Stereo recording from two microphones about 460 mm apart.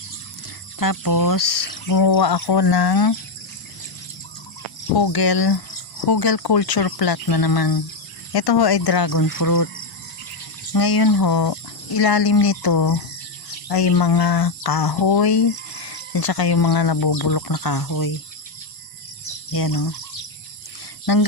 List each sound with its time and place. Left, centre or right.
0.8 s speech: left
4.9 s speech: left
10.7 s speech: left
19.5 s speech: left